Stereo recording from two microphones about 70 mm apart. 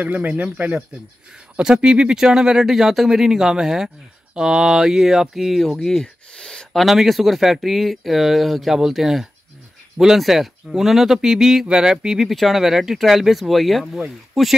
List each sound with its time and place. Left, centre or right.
0.0 s speech: right
1.6 s speech: centre